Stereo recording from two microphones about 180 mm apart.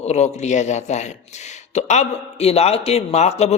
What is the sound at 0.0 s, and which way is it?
A man's voice, 35° left (ahead or behind).